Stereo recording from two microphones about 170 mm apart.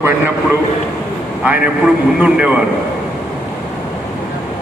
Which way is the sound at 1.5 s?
5° right (ahead or behind).